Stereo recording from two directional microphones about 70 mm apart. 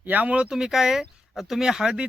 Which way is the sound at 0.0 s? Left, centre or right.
Right.